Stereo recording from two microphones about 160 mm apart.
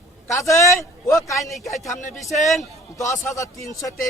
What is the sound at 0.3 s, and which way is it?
A man's voice, 20° left (ahead or behind).